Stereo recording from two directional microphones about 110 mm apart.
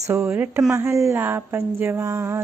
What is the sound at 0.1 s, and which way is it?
Speech, 25° right (ahead or behind).